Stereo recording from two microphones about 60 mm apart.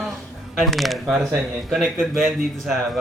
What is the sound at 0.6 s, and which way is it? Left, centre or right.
Speech, centre.